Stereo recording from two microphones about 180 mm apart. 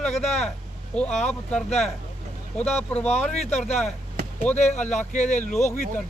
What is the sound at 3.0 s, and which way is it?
Speech, 40° left (ahead or behind).